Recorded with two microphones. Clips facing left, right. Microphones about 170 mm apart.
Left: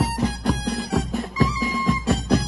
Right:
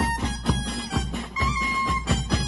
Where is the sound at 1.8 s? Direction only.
40° left (ahead or behind).